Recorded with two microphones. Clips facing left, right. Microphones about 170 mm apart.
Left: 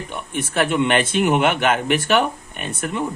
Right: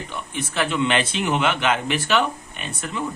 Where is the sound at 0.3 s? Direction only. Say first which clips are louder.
Left 4 dB; 55° left (ahead or behind).